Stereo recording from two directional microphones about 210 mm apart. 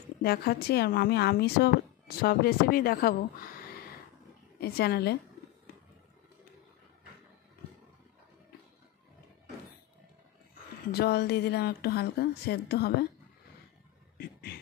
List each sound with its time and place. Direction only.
0.2 s speech: 50° left (ahead or behind)
4.6 s speech: 50° left (ahead or behind)
10.9 s speech: 50° left (ahead or behind)
14.1 s a sound: 50° left (ahead or behind)